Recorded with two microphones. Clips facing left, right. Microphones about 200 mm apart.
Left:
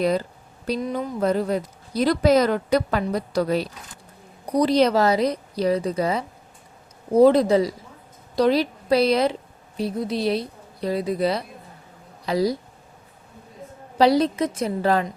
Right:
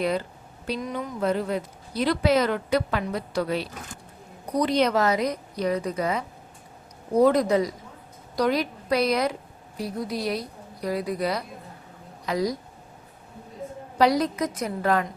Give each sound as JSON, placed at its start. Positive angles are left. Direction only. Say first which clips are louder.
{"t": 0.0, "sound": "a woman's voice", "louder": "left 4 dB", "side_deg": 40}
{"t": 14.0, "sound": "a woman's voice", "louder": "left 4 dB", "side_deg": 30}